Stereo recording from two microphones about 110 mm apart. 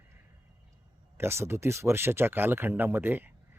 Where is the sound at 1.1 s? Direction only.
20° right (ahead or behind).